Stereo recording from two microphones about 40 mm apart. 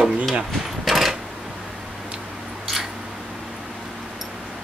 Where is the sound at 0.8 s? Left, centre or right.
Centre.